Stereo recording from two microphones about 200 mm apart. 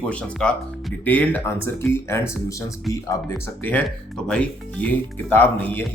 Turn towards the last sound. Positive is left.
turn(degrees=10)  # may be behind; listen again after turning